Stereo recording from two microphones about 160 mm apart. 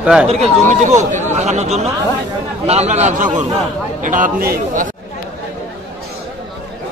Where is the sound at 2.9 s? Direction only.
45° right (ahead or behind).